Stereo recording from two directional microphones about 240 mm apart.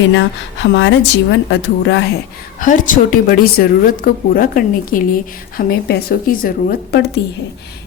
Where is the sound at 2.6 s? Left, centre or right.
Left.